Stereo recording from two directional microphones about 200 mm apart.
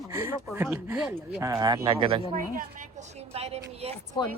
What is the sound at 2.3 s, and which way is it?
A woman's voice, 40° right (ahead or behind).